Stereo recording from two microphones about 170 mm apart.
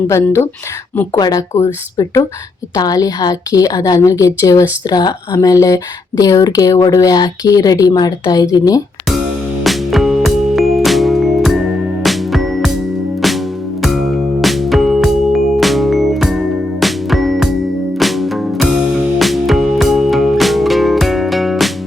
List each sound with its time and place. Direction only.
0.1 s a woman's voice: 15° left (ahead or behind)
9.6 s music: centre (ahead or behind)